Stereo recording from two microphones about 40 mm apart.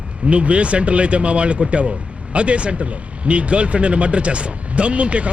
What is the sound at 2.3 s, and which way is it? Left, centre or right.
Vehicle, right.